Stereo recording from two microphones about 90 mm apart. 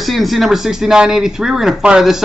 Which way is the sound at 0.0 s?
Centre (ahead or behind).